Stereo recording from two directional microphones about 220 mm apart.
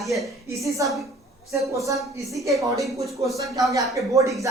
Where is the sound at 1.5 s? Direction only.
15° right (ahead or behind).